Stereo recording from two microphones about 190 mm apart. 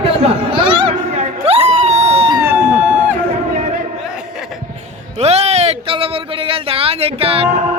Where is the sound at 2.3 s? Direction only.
15° right (ahead or behind).